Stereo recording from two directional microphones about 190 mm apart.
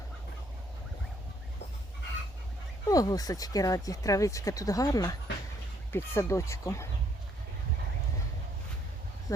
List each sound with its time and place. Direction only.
2.8 s speech: 20° left (ahead or behind)